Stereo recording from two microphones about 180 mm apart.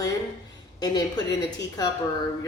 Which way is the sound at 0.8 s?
20° left (ahead or behind).